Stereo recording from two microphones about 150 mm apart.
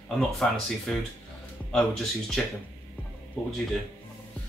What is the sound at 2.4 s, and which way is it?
Speech, 5° left (ahead or behind).